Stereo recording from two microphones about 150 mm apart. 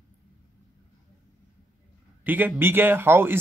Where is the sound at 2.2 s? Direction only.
10° right (ahead or behind).